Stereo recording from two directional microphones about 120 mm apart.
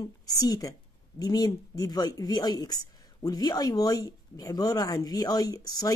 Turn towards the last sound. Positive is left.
turn(degrees=30)  # may be behind; listen again after turning